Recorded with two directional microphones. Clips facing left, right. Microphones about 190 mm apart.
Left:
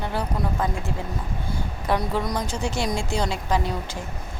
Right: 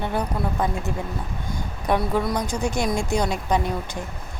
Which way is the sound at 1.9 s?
20° right (ahead or behind).